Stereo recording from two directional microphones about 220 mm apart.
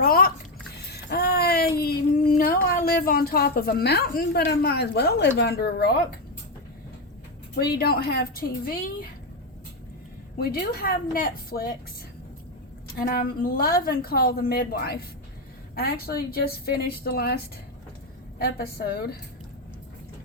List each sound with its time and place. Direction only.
0.0 s a sound: 40° left (ahead or behind)
1.8 s speech: 45° left (ahead or behind)
7.5 s a woman's voice: 45° left (ahead or behind)
10.3 s a woman's voice: 45° left (ahead or behind)
13.0 s a woman's voice: 40° left (ahead or behind)